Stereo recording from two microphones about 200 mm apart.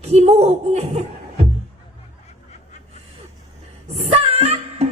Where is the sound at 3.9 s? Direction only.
30° right (ahead or behind).